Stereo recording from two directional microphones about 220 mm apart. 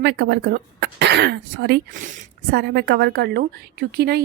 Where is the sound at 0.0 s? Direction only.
50° right (ahead or behind).